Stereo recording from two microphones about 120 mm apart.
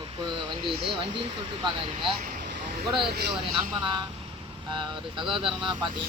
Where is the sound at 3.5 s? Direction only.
40° right (ahead or behind).